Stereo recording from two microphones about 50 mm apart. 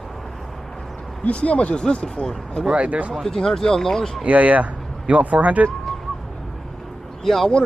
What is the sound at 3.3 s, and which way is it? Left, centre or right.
Speech, centre.